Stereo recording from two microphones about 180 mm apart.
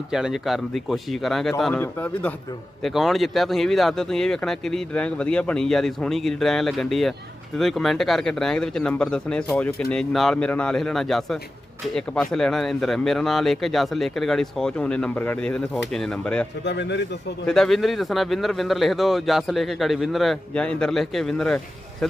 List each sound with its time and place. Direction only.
0.1 s a man's voice: 5° right (ahead or behind)
2.8 s speech: centre (ahead or behind)
16.6 s a man's voice: 75° left (ahead or behind)
17.4 s speech: 5° left (ahead or behind)